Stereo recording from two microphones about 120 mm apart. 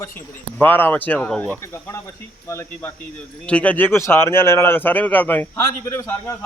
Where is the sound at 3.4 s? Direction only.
10° left (ahead or behind).